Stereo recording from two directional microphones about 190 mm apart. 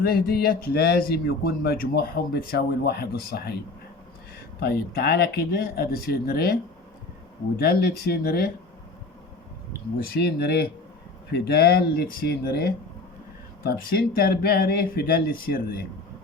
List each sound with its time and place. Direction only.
0.0 s speech: 50° left (ahead or behind)
4.6 s speech: 55° left (ahead or behind)
7.6 s speech: 55° left (ahead or behind)
10.0 s speech: 50° left (ahead or behind)